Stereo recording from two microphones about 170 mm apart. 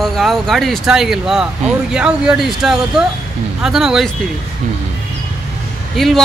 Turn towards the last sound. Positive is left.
turn(degrees=0)  # may be behind; listen again after turning